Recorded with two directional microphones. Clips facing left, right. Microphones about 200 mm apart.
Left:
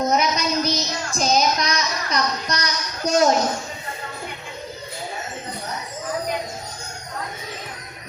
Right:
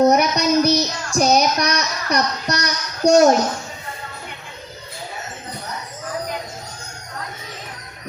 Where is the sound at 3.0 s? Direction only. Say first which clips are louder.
Right 6 dB; 70° right (ahead or behind).